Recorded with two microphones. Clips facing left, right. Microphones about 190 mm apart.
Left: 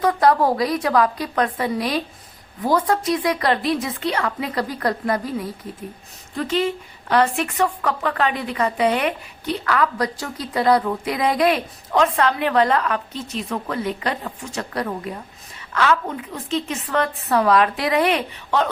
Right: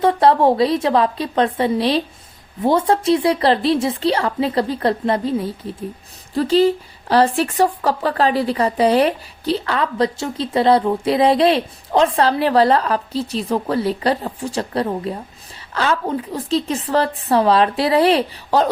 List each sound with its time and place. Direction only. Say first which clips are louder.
0.0 s a woman's voice: right 3 dB; 25° right (ahead or behind)